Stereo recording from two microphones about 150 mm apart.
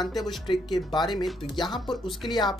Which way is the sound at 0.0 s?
25° left (ahead or behind).